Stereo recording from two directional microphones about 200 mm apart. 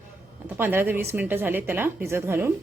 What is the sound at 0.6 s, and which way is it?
A woman's voice, 10° right (ahead or behind).